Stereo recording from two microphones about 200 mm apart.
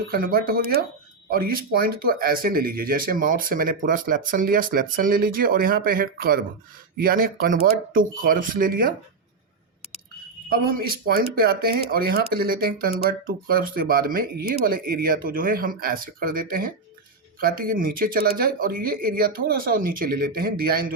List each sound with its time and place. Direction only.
0.1 s speech: 45° right (ahead or behind)
10.5 s speech: 50° right (ahead or behind)